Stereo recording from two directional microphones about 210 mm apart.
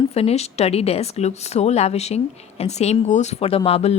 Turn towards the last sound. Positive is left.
turn(degrees=30)  # may be behind; listen again after turning